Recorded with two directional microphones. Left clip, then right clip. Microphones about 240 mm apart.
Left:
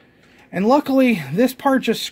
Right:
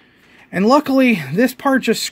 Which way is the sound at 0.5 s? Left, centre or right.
Centre.